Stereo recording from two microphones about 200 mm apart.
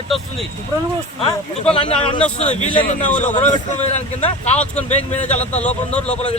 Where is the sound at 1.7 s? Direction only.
25° left (ahead or behind).